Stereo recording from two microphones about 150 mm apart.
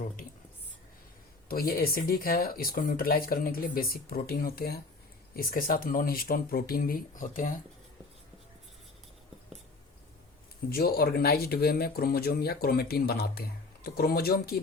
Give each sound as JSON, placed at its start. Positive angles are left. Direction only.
{"t": 1.5, "sound": "speech", "side_deg": 85}
{"t": 5.3, "sound": "speech", "side_deg": 75}
{"t": 10.7, "sound": "speech", "side_deg": 90}